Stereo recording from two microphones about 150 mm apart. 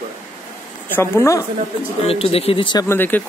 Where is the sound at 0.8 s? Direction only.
15° left (ahead or behind).